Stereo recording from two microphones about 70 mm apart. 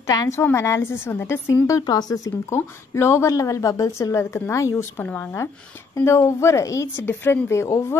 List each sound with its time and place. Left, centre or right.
0.0 s a woman's voice: left
0.4 s speech: left
1.9 s speech: left
2.5 s a woman's voice: left
5.0 s speech: left
5.9 s a woman's voice: left
7.1 s speech: left